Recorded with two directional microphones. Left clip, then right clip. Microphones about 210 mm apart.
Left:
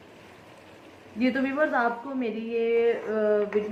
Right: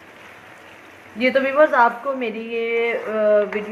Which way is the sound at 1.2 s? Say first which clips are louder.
Right 10 dB; 35° right (ahead or behind).